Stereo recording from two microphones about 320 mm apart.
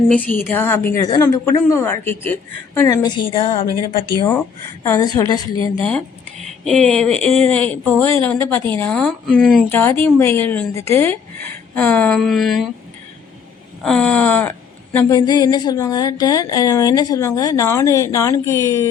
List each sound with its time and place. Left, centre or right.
0.1 s speech: centre
6.7 s speech: centre
13.8 s speech: centre